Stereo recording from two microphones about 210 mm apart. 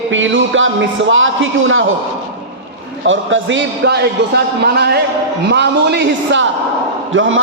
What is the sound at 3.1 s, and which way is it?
Music, 65° right (ahead or behind).